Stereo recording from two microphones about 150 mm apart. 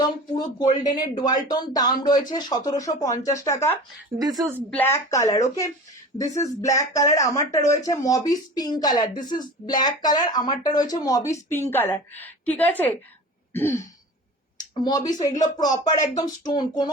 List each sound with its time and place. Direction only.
0.0 s speech: 30° left (ahead or behind)
4.4 s speech: 20° right (ahead or behind)
4.7 s a woman's voice: 15° left (ahead or behind)
14.8 s speech: 25° left (ahead or behind)